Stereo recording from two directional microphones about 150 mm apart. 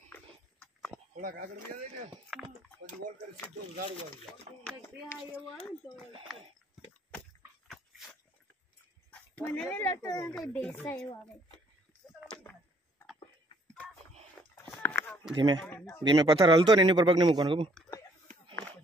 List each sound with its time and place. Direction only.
0.1 s a sound: 5° left (ahead or behind)
1.2 s speech: 75° right (ahead or behind)
2.3 s speech: centre (ahead or behind)
4.3 s speech: 10° left (ahead or behind)
7.6 s dog: centre (ahead or behind)
9.1 s speech: 10° left (ahead or behind)
14.8 s a sound: 10° left (ahead or behind)
15.3 s speech: 30° right (ahead or behind)
15.6 s speech: 15° left (ahead or behind)
16.0 s a man's voice: 30° right (ahead or behind)